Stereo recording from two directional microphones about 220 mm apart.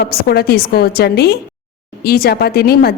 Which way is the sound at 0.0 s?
45° left (ahead or behind).